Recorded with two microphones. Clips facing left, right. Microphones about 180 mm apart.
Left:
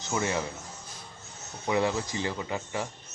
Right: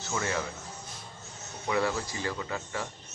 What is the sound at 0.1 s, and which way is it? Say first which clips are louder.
Speech: left 3 dB; 15° left (ahead or behind).